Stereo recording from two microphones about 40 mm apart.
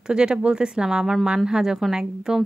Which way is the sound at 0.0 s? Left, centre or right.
Right.